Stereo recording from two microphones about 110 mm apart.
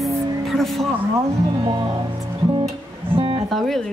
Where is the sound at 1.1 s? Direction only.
40° right (ahead or behind).